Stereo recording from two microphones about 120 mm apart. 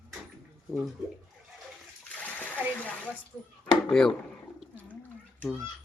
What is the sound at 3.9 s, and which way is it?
Speech, 5° left (ahead or behind).